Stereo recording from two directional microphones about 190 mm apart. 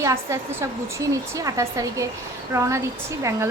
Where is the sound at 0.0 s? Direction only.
15° right (ahead or behind).